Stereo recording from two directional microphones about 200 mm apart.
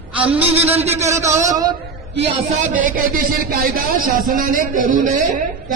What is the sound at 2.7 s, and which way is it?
Speech, 45° right (ahead or behind).